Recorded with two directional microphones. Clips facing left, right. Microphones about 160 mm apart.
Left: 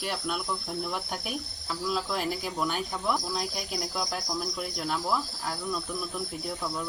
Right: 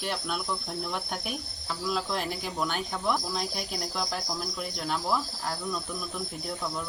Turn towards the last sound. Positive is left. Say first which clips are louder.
# left 1 dB
turn(degrees=0)  # may be behind; listen again after turning